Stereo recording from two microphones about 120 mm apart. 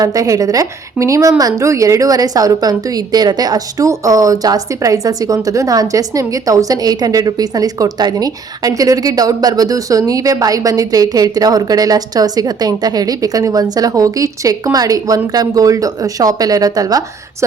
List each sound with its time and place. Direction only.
0.0 s a woman's voice: 30° right (ahead or behind)